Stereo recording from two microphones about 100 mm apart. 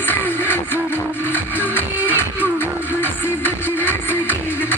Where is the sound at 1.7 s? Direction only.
20° left (ahead or behind).